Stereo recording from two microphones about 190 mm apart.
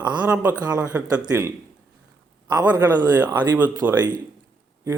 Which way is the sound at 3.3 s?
20° right (ahead or behind).